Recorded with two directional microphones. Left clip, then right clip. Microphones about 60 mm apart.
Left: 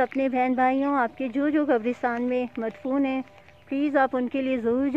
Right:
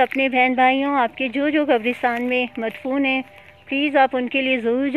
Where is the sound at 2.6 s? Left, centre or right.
Centre.